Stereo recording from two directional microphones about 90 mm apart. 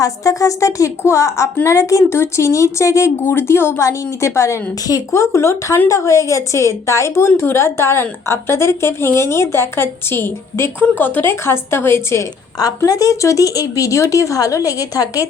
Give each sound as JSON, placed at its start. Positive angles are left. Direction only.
{"t": 0.0, "sound": "a woman's voice", "side_deg": 40}
{"t": 12.5, "sound": "speech", "side_deg": 45}